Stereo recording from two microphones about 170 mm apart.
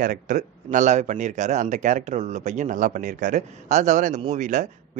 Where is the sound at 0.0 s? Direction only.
50° right (ahead or behind).